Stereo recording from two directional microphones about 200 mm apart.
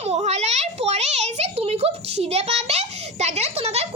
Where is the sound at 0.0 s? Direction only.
30° right (ahead or behind).